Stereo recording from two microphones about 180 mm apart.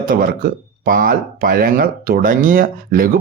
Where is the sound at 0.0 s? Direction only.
50° right (ahead or behind).